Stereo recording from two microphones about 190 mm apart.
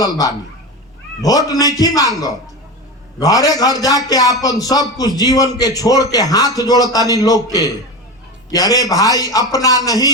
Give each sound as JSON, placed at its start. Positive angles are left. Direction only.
{"t": 0.0, "sound": "a man's voice", "side_deg": 20}